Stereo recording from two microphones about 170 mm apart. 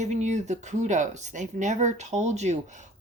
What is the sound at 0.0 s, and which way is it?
A woman's voice, 45° right (ahead or behind).